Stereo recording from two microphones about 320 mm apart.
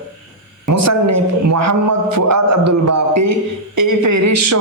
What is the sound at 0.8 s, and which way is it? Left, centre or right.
A man's voice, right.